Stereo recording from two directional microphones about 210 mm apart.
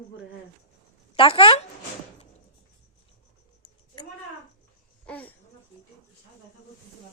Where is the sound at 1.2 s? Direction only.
25° left (ahead or behind).